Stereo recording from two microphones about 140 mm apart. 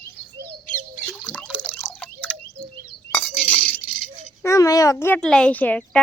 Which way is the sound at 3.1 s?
10° left (ahead or behind).